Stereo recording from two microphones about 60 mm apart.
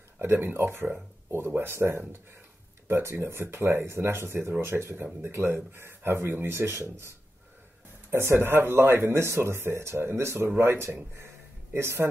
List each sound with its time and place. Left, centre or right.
0.4 s speech: right